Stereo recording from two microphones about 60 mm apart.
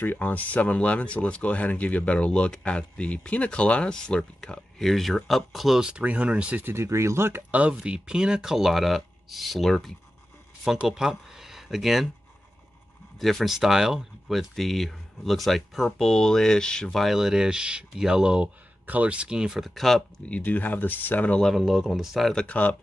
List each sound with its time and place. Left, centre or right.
0.0 s speech: left; by 5.8 s centre
5.8 s speech: centre
6.6 s speech: right
7.7 s speech: centre
10.9 s speech: centre
13.2 s speech: centre
14.3 s speech: centre
17.0 s speech: centre
19.7 s speech: centre
20.2 s speech: left
21.4 s speech: centre
22.5 s speech: left